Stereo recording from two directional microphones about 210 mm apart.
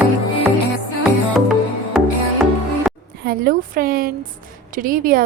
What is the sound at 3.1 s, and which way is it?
A woman's voice, 45° right (ahead or behind).